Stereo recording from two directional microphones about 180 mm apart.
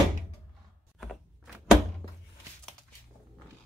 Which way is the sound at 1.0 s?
Centre (ahead or behind).